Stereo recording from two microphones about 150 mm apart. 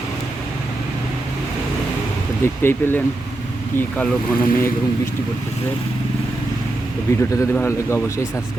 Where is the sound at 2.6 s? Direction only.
15° left (ahead or behind).